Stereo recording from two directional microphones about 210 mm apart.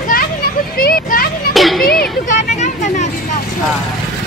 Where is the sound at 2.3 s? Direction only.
35° left (ahead or behind).